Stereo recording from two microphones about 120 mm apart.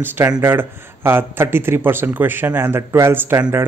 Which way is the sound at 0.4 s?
20° right (ahead or behind).